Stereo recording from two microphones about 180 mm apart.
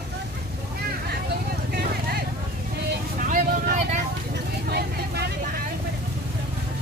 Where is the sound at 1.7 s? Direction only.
60° right (ahead or behind).